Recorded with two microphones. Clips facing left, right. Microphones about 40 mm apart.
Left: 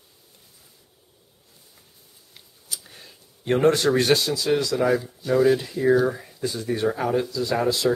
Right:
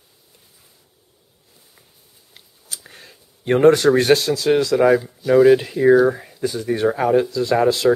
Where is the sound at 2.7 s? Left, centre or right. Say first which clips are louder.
Right 2 dB; right.